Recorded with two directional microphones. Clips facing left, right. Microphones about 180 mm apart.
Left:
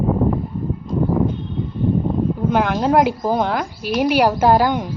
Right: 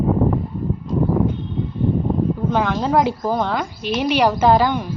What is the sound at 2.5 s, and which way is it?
A woman's voice, 5° left (ahead or behind).